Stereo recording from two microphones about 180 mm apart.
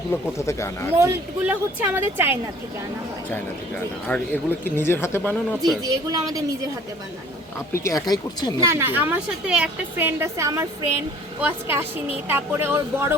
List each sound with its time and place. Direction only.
0.3 s speech: 15° left (ahead or behind)
0.9 s a woman's voice: 10° right (ahead or behind)
4.1 s speech: 10° left (ahead or behind)
5.8 s speech: 20° right (ahead or behind)
7.7 s speech: 15° left (ahead or behind)
8.6 s a woman's voice: 15° right (ahead or behind)